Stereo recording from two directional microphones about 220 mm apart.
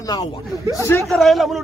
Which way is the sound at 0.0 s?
15° left (ahead or behind).